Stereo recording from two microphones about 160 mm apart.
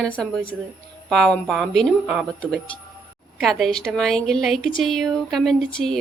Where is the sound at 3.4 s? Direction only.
Centre (ahead or behind).